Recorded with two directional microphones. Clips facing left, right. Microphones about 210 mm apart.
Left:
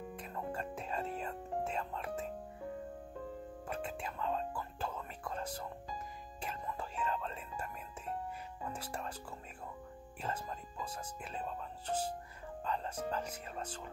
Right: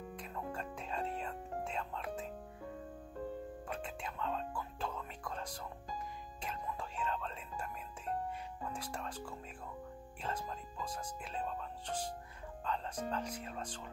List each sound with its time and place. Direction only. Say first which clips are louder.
0.2 s music: left 2 dB; 5° left (ahead or behind)
3.6 s music: left 2 dB; 5° left (ahead or behind)
8.7 s speech: even; 5° left (ahead or behind)
10.2 s speech: even; 5° left (ahead or behind)